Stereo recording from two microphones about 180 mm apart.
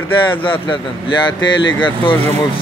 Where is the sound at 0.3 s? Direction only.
25° left (ahead or behind).